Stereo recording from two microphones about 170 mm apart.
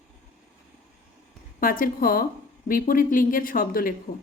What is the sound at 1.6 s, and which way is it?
Speech, 55° left (ahead or behind).